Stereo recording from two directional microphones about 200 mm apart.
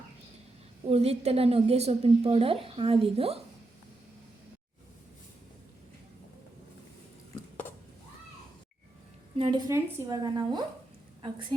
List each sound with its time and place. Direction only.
0.9 s a woman's voice: 30° right (ahead or behind)
9.4 s a woman's voice: 20° right (ahead or behind)